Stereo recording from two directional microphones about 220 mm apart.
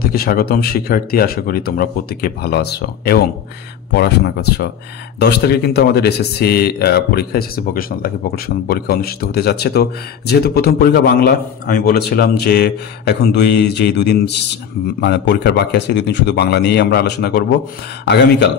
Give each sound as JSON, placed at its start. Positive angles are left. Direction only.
{"t": 0.1, "sound": "a man's voice", "side_deg": 45}